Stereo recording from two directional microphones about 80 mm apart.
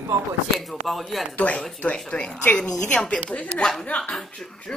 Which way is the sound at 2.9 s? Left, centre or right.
Centre.